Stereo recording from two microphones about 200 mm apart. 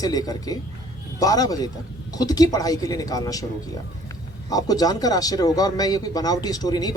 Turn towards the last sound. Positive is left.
turn(degrees=20)  # may be behind; listen again after turning